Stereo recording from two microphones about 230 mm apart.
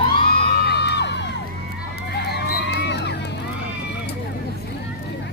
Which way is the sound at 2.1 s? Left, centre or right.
Left.